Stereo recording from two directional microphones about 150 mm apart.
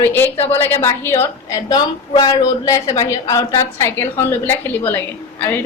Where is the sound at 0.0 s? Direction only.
15° left (ahead or behind).